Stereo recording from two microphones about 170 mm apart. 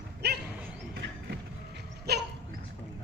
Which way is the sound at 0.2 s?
75° right (ahead or behind).